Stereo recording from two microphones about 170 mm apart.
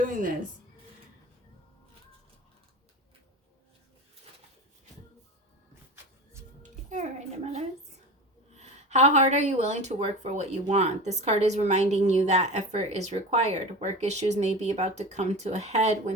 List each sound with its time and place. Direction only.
0.0 s speech: 50° right (ahead or behind)
8.5 s speech: 40° right (ahead or behind)